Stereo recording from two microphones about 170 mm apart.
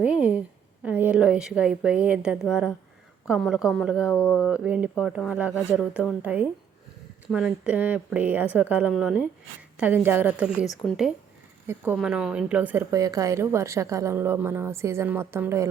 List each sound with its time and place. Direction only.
0.0 s a woman's voice: 5° right (ahead or behind)
4.1 s a sound: 10° left (ahead or behind)
4.5 s a woman's voice: 5° right (ahead or behind)
12.9 s a woman's voice: 20° right (ahead or behind)